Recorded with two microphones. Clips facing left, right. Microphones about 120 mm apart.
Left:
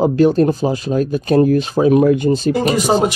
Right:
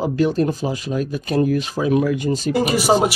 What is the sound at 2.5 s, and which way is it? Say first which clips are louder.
Speech: left 2 dB; 5° right (ahead or behind).